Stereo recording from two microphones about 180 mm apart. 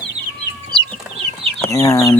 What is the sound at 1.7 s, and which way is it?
Speech, 15° left (ahead or behind).